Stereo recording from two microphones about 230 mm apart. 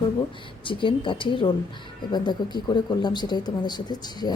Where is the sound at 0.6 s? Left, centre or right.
Left.